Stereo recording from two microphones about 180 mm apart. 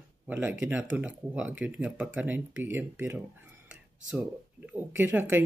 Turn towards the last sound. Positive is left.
turn(degrees=-10)  # may be behind; listen again after turning